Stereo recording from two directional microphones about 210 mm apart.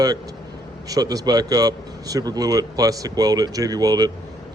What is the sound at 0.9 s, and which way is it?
A man's voice, 15° right (ahead or behind).